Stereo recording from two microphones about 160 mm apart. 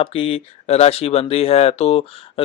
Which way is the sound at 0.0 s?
35° left (ahead or behind).